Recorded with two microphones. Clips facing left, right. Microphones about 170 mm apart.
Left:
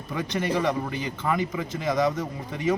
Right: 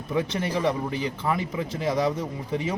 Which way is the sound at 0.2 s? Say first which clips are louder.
Right 2 dB; 30° right (ahead or behind).